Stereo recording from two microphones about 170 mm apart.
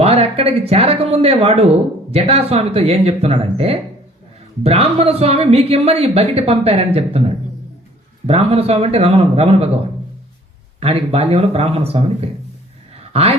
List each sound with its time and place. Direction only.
0.0 s speech: 35° right (ahead or behind)
10.8 s speech: 35° right (ahead or behind)